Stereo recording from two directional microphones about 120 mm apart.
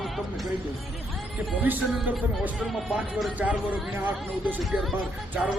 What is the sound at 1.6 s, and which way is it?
Speech, 15° right (ahead or behind).